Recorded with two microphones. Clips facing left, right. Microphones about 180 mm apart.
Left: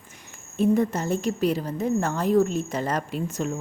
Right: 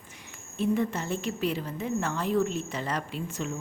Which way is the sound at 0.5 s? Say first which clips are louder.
Left 5 dB; 45° left (ahead or behind).